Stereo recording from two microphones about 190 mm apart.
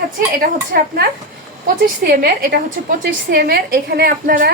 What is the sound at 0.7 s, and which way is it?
Speech, 55° right (ahead or behind).